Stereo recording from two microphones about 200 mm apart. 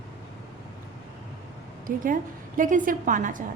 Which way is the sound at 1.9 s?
45° right (ahead or behind).